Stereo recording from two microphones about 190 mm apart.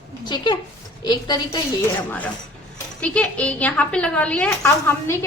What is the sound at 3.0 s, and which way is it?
A woman's voice, 5° left (ahead or behind).